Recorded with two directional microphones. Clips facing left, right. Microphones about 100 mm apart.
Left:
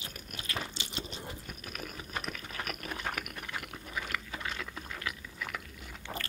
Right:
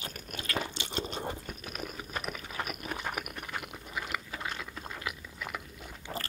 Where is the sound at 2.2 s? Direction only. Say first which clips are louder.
Right 2 dB; 10° right (ahead or behind).